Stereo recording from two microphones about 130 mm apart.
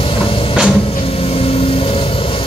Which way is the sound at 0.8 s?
50° left (ahead or behind).